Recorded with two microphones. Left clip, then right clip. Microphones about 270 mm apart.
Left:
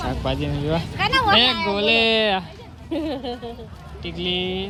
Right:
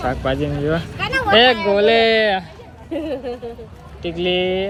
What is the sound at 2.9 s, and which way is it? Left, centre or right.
Speech, left.